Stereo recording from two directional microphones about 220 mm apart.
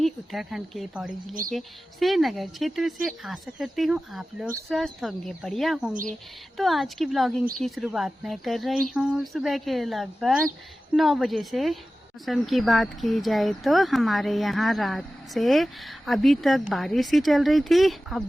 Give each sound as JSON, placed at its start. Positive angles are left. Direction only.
{"t": 0.0, "sound": "speech", "side_deg": 0}
{"t": 5.9, "sound": "speech", "side_deg": -35}
{"t": 6.6, "sound": "speech", "side_deg": 0}